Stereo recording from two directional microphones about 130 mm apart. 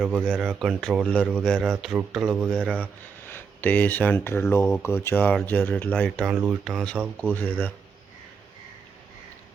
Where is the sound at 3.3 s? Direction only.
15° left (ahead or behind).